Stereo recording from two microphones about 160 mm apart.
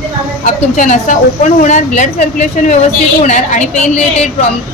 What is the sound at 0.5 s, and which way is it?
A woman's voice, 50° left (ahead or behind).